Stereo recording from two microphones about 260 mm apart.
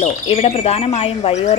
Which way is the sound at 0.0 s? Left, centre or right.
Left.